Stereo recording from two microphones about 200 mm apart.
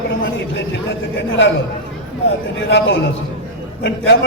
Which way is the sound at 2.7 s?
70° left (ahead or behind).